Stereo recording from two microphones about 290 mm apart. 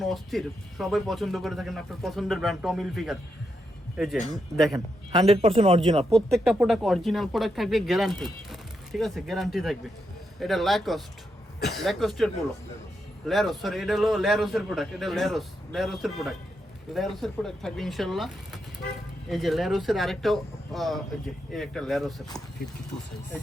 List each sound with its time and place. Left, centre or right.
0.0 s speech: centre
5.3 s speech: centre
6.1 s speech: centre